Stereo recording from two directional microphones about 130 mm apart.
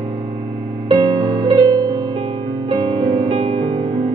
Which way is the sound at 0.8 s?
35° right (ahead or behind).